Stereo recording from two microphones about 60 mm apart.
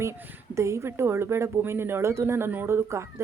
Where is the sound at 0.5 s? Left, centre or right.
Right.